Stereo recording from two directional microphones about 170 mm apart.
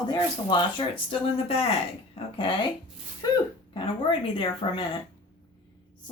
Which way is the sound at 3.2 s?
20° left (ahead or behind).